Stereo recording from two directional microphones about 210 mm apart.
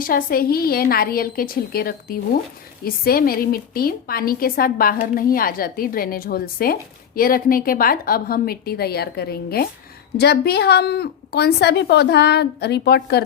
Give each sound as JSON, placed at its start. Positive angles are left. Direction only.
{"t": 0.0, "sound": "a woman's voice", "side_deg": 45}